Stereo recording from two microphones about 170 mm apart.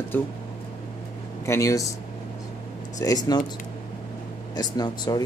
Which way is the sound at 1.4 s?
15° left (ahead or behind).